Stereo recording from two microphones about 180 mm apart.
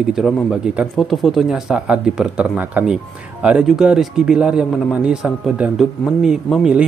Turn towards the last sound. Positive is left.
turn(degrees=-5)  # may be behind; listen again after turning